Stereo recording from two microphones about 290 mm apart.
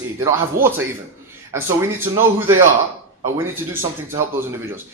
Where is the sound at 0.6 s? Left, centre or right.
Right.